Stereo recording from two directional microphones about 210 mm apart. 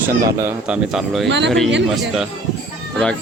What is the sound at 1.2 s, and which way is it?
Speech, 55° right (ahead or behind).